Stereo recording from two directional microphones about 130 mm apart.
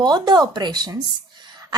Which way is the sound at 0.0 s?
35° right (ahead or behind).